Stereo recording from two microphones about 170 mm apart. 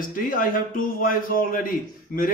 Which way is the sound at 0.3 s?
55° left (ahead or behind).